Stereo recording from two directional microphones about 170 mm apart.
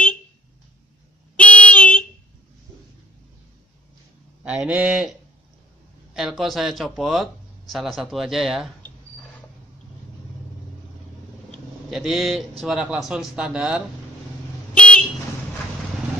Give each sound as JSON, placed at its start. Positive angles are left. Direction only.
{"t": 1.3, "sound": "a sound", "side_deg": 10}
{"t": 4.5, "sound": "speech", "side_deg": -5}
{"t": 6.1, "sound": "speech", "side_deg": 0}
{"t": 11.5, "sound": "a sound", "side_deg": 0}
{"t": 12.6, "sound": "speech", "side_deg": -5}
{"t": 14.7, "sound": "vehicle", "side_deg": 5}